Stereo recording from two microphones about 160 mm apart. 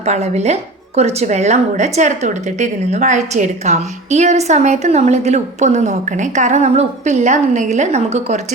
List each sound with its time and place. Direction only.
0.0 s speech: 45° right (ahead or behind)